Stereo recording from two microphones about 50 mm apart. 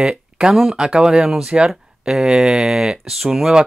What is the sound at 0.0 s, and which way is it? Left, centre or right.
Speech, centre.